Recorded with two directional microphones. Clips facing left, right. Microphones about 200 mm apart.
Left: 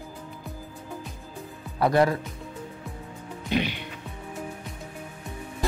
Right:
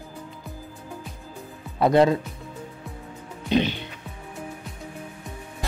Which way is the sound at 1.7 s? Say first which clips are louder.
Right 3 dB; 25° right (ahead or behind).